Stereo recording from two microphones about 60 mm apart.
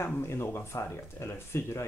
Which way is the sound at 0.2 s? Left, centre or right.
Left.